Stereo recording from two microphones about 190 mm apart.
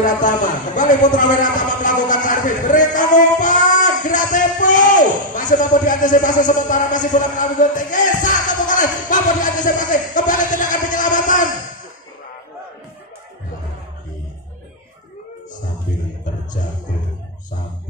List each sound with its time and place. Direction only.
0.0 s a man's voice: 40° left (ahead or behind)
7.2 s music: 40° left (ahead or behind)